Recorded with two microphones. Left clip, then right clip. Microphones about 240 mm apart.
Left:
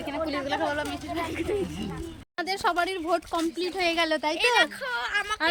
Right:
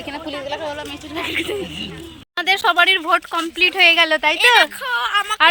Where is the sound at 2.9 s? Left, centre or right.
Right.